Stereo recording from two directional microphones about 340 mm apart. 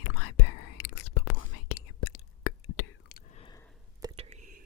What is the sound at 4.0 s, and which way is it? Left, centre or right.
Whispering, centre.